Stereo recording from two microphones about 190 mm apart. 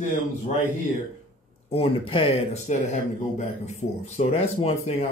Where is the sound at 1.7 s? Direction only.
30° left (ahead or behind).